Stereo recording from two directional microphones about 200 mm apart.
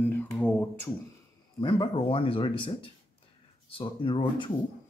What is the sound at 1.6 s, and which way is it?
A man's voice, 25° left (ahead or behind).